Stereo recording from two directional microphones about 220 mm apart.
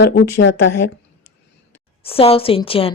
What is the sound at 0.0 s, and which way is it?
Speech, 55° left (ahead or behind).